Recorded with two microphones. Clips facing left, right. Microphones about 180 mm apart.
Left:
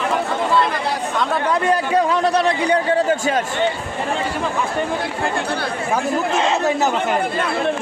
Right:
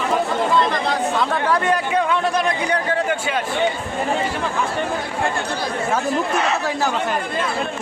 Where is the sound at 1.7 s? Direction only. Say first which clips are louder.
Left 2 dB; 35° left (ahead or behind).